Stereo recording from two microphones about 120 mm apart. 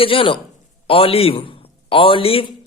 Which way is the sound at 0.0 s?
50° left (ahead or behind).